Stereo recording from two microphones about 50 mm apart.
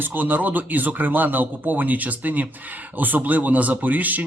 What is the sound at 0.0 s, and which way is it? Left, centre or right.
Speech, right.